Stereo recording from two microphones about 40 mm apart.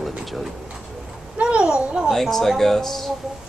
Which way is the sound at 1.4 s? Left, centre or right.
Right.